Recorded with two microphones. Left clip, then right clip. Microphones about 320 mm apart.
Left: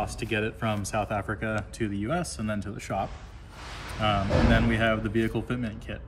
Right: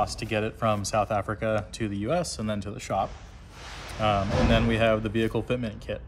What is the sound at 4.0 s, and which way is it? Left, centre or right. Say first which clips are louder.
Speech: right 1 dB; right.